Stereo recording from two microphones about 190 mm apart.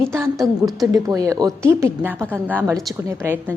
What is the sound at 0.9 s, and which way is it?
A woman's voice, 20° right (ahead or behind).